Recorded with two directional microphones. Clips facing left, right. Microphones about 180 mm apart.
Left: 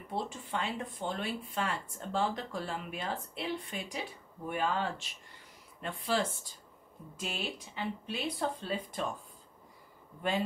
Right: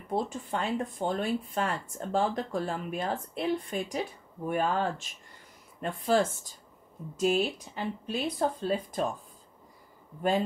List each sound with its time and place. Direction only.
0.1 s speech: 45° right (ahead or behind)